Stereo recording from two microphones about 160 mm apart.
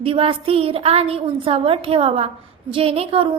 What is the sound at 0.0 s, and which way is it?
A woman's voice, 35° right (ahead or behind).